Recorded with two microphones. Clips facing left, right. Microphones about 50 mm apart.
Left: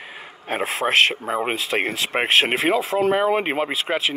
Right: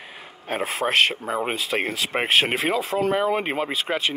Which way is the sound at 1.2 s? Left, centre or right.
Centre.